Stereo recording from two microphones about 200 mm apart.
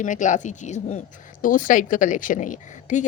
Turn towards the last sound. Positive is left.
turn(degrees=40)  # may be behind; listen again after turning